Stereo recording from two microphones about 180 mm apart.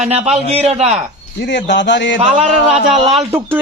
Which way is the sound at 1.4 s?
75° left (ahead or behind).